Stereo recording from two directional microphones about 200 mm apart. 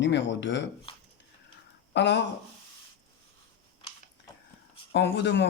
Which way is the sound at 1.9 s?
65° left (ahead or behind).